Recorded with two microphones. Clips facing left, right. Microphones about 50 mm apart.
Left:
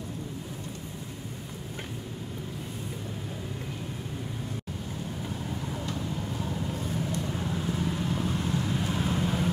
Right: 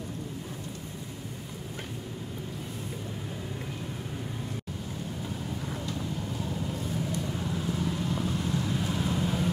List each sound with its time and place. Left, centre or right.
7.5 s vehicle: left